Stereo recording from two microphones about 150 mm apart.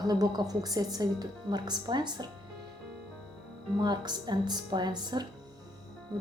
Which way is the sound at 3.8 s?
30° right (ahead or behind).